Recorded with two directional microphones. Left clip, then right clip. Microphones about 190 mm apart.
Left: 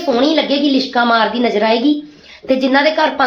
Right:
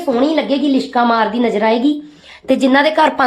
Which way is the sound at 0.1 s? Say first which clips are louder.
Left 1 dB; 35° right (ahead or behind).